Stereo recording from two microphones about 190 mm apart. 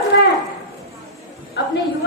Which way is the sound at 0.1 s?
65° left (ahead or behind).